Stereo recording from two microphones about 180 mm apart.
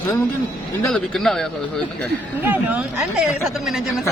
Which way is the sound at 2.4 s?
10° right (ahead or behind).